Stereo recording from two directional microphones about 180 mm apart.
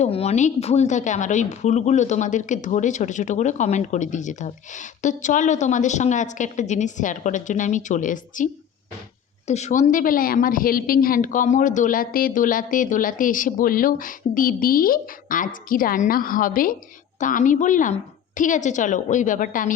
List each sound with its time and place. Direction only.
0.0 s speech: 35° left (ahead or behind)
9.5 s speech: 40° left (ahead or behind)